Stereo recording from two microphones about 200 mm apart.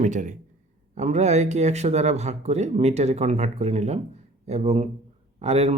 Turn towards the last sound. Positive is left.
turn(degrees=-30)  # may be behind; listen again after turning